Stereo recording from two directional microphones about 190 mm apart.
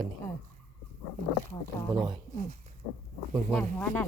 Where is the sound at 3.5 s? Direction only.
5° left (ahead or behind).